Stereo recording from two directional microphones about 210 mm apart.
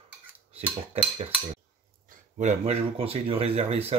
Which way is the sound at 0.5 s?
30° right (ahead or behind).